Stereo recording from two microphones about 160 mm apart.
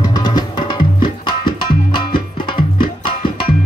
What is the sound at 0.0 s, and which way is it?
Music, 25° left (ahead or behind).